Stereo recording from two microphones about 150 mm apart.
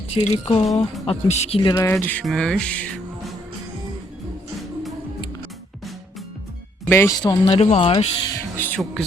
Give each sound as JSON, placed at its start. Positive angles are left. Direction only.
{"t": 0.3, "sound": "speech", "side_deg": 45}
{"t": 1.7, "sound": "speech", "side_deg": 15}
{"t": 6.8, "sound": "speech", "side_deg": 15}
{"t": 7.2, "sound": "speech", "side_deg": 25}
{"t": 7.6, "sound": "speech", "side_deg": 40}
{"t": 8.5, "sound": "speech", "side_deg": 10}